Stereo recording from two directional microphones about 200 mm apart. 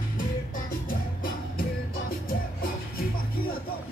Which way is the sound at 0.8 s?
45° left (ahead or behind).